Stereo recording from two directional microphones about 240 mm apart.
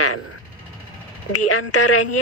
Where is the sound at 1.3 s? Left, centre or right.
Left.